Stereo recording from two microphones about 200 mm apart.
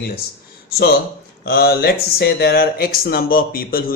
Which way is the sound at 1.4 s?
50° left (ahead or behind).